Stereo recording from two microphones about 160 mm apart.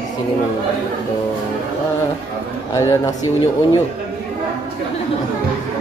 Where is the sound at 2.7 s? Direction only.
20° left (ahead or behind).